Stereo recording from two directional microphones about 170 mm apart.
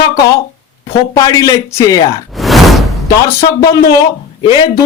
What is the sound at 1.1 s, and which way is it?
Speech, 20° left (ahead or behind).